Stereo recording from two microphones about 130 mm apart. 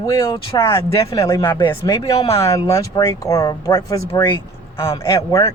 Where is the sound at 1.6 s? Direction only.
35° left (ahead or behind).